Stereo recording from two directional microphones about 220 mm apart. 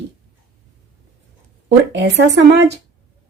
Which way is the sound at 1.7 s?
50° right (ahead or behind).